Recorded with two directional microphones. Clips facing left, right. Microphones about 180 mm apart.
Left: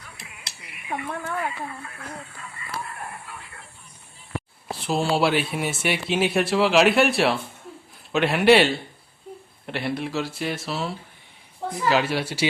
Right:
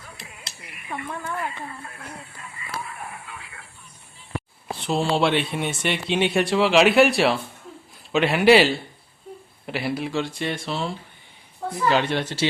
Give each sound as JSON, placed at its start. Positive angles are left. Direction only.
{"t": 0.9, "sound": "speech", "side_deg": 55}
{"t": 2.8, "sound": "radio", "side_deg": 0}
{"t": 4.7, "sound": "speech", "side_deg": 0}